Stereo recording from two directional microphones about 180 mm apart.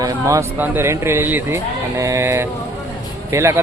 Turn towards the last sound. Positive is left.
turn(degrees=-15)  # may be behind; listen again after turning